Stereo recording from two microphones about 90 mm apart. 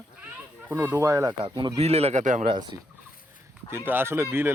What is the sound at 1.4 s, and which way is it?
Speech, 60° right (ahead or behind).